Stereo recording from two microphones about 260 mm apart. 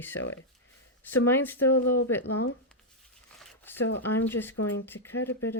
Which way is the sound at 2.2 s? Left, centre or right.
Left.